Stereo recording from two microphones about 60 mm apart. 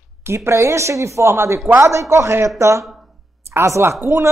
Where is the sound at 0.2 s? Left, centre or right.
Right.